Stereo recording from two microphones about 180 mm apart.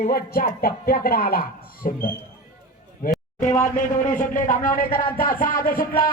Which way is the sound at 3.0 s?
55° left (ahead or behind).